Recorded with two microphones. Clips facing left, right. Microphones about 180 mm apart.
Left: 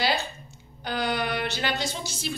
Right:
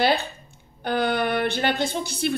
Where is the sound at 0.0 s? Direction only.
55° right (ahead or behind).